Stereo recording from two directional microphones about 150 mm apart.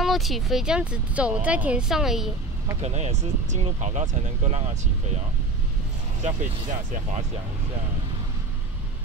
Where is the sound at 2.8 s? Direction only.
50° right (ahead or behind).